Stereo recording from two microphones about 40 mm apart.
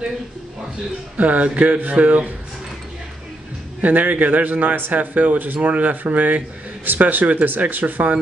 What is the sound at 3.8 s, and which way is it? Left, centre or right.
Speech, right.